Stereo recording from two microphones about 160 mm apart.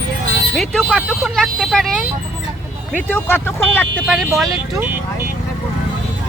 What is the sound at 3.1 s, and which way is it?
Speech, 15° left (ahead or behind).